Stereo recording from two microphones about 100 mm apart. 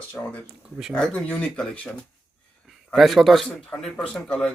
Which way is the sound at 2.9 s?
Centre (ahead or behind).